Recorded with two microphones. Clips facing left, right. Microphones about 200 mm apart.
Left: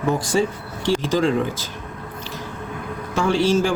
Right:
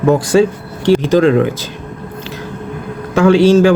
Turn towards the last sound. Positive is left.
turn(degrees=-70)  # may be behind; listen again after turning